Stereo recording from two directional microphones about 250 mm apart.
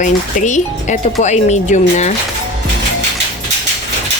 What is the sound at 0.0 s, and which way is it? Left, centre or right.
Speech, left.